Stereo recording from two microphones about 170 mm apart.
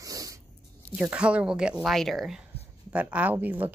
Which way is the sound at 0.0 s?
20° right (ahead or behind).